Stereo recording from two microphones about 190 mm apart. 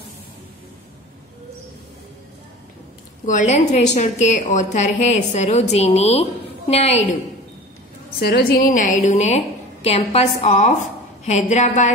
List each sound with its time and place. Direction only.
3.3 s a woman's voice: 40° left (ahead or behind)
8.2 s a woman's voice: 55° left (ahead or behind); by 11.9 s 40° left (ahead or behind)